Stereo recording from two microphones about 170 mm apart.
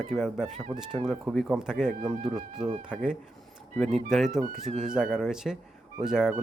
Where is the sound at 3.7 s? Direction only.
Centre (ahead or behind).